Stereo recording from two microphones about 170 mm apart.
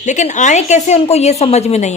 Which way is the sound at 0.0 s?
45° left (ahead or behind).